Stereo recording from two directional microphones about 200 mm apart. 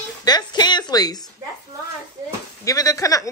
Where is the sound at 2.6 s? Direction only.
15° left (ahead or behind).